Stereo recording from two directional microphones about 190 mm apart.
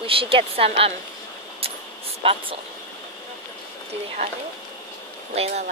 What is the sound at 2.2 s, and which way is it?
Speech, 30° right (ahead or behind).